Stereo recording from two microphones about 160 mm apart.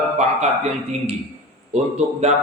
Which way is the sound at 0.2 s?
45° right (ahead or behind).